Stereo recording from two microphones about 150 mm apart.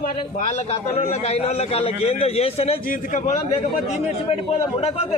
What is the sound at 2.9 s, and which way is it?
Speech, 60° left (ahead or behind).